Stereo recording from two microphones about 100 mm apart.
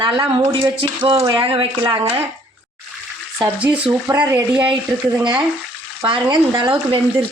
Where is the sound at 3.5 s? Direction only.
10° right (ahead or behind).